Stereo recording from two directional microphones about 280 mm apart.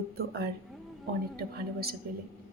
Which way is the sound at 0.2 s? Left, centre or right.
Right.